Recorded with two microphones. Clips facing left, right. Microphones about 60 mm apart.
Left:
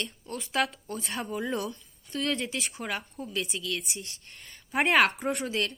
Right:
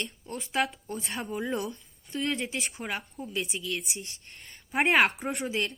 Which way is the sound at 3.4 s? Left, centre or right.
Right.